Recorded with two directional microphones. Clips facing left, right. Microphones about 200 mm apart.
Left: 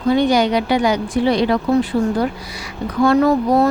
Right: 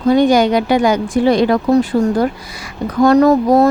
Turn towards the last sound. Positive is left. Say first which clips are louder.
# right 4 dB
turn(degrees=-45)  # may be behind; listen again after turning